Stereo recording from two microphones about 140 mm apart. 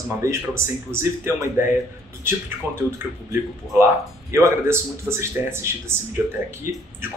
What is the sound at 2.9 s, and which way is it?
Speech, 20° right (ahead or behind).